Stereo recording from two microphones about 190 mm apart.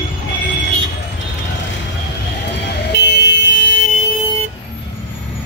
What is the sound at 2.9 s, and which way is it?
Vehicle, 65° left (ahead or behind).